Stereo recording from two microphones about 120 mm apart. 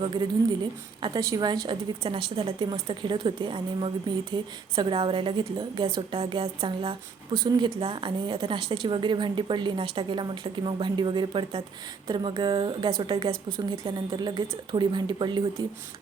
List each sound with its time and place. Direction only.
0.0 s speech: 40° right (ahead or behind)
1.6 s a woman's voice: 45° right (ahead or behind)
7.3 s a woman's voice: 40° right (ahead or behind)